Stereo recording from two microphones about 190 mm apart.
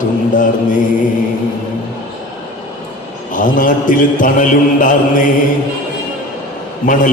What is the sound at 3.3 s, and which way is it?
Mantra, 45° left (ahead or behind).